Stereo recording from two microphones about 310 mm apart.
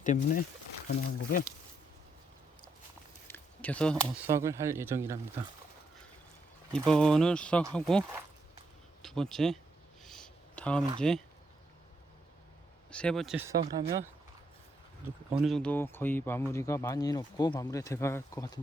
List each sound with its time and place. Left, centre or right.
0.0 s speech: left
3.2 s speech: centre
6.7 s speech: centre
10.0 s a sound: centre
12.9 s speech: centre